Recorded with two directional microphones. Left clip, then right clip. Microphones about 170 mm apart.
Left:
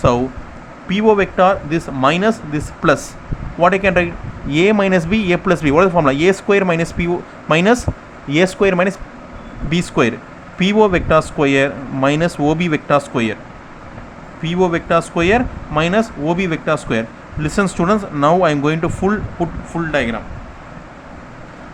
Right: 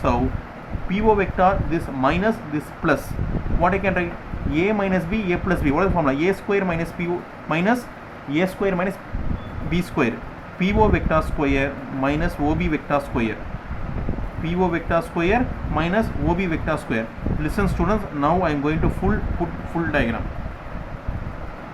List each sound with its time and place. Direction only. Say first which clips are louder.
0.9 s speech: left 5 dB; 50° left (ahead or behind)
14.4 s speech: left 6 dB; 50° left (ahead or behind)